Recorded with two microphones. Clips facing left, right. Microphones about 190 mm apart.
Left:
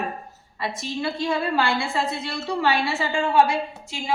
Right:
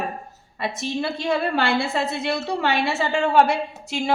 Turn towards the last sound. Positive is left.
turn(degrees=-70)  # may be behind; listen again after turning